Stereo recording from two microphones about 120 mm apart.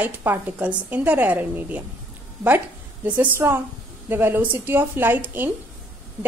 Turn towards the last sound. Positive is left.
turn(degrees=-15)  # may be behind; listen again after turning